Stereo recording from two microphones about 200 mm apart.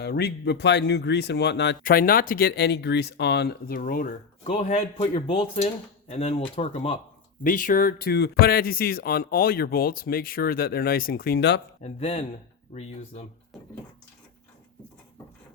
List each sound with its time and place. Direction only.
0.0 s speech: 55° left (ahead or behind)
4.4 s speech: 30° left (ahead or behind)
7.4 s speech: 45° left (ahead or behind)
11.8 s speech: 30° left (ahead or behind)